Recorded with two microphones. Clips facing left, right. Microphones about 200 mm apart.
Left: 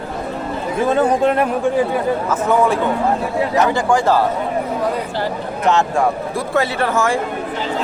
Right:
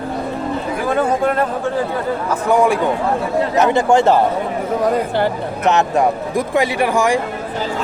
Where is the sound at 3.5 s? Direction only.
20° right (ahead or behind).